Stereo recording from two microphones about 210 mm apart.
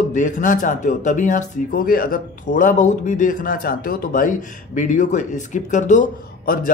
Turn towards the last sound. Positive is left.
turn(degrees=40)  # may be behind; listen again after turning